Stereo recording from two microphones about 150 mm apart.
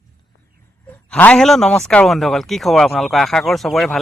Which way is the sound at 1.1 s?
10° left (ahead or behind).